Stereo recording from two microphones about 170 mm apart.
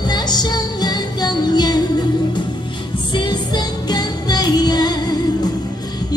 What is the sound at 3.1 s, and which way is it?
Music, 25° left (ahead or behind).